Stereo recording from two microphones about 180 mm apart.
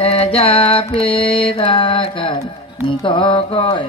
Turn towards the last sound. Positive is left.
turn(degrees=30)  # may be behind; listen again after turning